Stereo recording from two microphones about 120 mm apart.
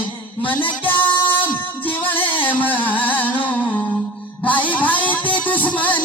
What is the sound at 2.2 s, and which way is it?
Music, 15° left (ahead or behind).